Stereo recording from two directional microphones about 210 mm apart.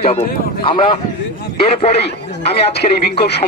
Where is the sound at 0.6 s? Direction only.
25° left (ahead or behind).